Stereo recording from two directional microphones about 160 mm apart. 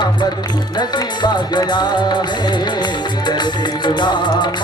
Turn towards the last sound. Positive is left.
turn(degrees=25)  # may be behind; listen again after turning